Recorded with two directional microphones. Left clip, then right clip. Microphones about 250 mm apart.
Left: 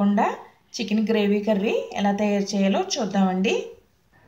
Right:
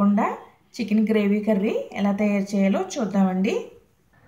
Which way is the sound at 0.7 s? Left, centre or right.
Centre.